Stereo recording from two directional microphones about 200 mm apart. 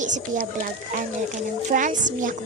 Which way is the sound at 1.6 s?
40° right (ahead or behind).